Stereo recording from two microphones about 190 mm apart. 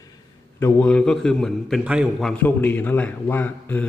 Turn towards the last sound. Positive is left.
turn(degrees=10)  # may be behind; listen again after turning